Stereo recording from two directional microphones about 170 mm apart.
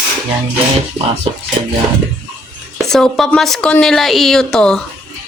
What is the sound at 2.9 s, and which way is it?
A woman's voice, 5° left (ahead or behind).